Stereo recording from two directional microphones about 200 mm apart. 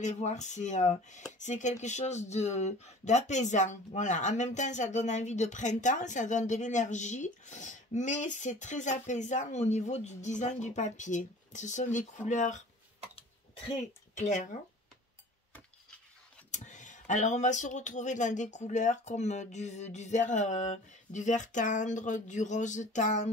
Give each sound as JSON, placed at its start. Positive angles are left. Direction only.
{"t": 0.0, "sound": "speech", "side_deg": 35}
{"t": 13.7, "sound": "speech", "side_deg": 35}
{"t": 16.4, "sound": "speech", "side_deg": 40}